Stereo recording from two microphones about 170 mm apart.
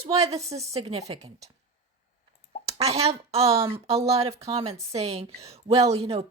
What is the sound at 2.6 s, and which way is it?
A woman's voice, 35° right (ahead or behind).